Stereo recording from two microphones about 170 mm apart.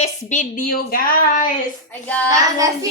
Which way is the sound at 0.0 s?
45° left (ahead or behind).